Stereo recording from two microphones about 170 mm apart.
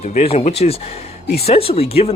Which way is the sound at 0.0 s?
40° left (ahead or behind).